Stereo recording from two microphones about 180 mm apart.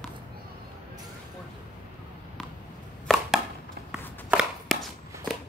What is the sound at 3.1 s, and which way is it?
Chopping, 5° left (ahead or behind).